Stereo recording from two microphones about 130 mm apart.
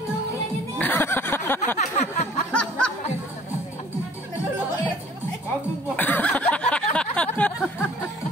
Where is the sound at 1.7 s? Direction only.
60° left (ahead or behind).